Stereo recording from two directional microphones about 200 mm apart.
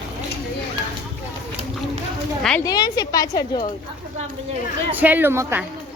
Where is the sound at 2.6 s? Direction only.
20° left (ahead or behind).